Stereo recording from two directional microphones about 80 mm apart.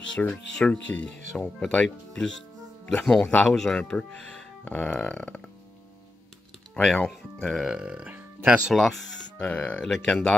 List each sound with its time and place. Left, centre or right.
0.3 s speech: centre
6.7 s speech: centre
7.6 s speech: centre
8.1 s music: right
8.7 s speech: centre